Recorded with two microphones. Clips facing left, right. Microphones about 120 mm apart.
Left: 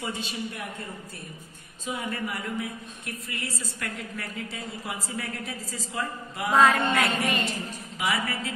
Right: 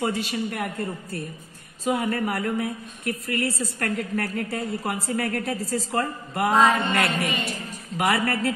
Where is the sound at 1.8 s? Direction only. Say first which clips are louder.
Right 8 dB; 85° right.